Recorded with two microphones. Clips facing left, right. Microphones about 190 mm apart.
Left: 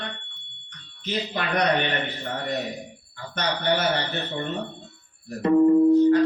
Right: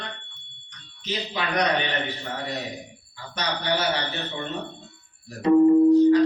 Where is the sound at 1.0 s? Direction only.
55° left (ahead or behind).